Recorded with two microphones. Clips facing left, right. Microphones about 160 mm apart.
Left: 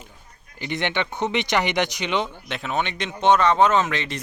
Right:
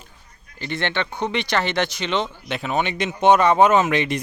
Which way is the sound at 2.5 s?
Centre (ahead or behind).